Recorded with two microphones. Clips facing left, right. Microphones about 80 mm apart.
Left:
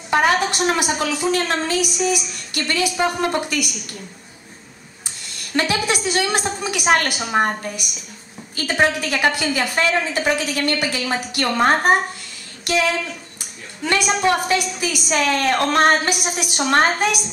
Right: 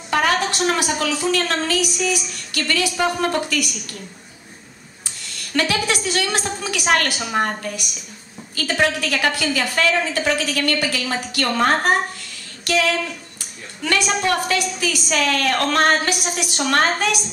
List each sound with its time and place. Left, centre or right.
0.1 s a woman's voice: left
5.5 s a woman's voice: left